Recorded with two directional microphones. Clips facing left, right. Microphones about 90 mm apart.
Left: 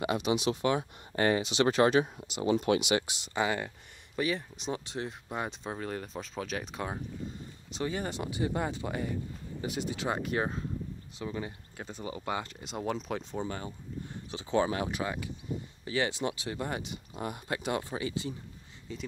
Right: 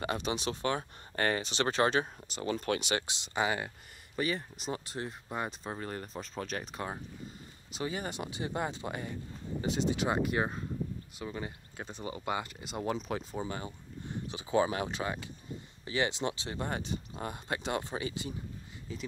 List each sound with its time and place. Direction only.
0.0 s speech: 35° right (ahead or behind)
3.1 s speech: 20° right (ahead or behind)
4.2 s speech: centre (ahead or behind); by 10.0 s 25° right (ahead or behind)
10.0 s speech: 5° right (ahead or behind)
11.3 s speech: 25° right (ahead or behind)
12.4 s speech: centre (ahead or behind)
13.6 s speech: 15° right (ahead or behind)
14.7 s speech: 25° right (ahead or behind)